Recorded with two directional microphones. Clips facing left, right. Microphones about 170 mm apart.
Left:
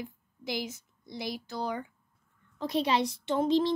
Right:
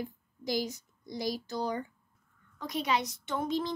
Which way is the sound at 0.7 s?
5° left (ahead or behind).